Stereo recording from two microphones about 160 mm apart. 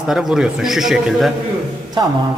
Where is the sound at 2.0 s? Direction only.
30° right (ahead or behind).